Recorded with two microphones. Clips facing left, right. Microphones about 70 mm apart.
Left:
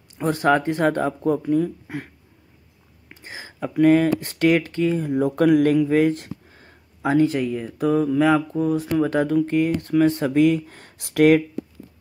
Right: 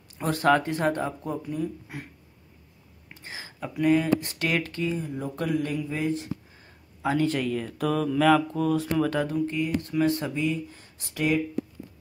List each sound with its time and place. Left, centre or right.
0.2 s speech: left
3.2 s a sound: left
3.7 s speech: left
4.9 s speech: left
7.1 s speech: left
10.2 s speech: left